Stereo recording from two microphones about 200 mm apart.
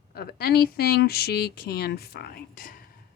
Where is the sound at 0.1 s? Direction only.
50° left (ahead or behind).